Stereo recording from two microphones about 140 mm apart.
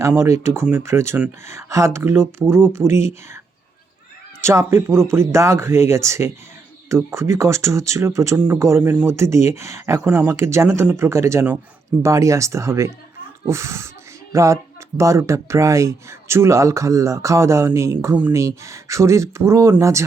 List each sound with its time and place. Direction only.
0.2 s speech: 20° right (ahead or behind)
4.4 s speech: 20° right (ahead or behind)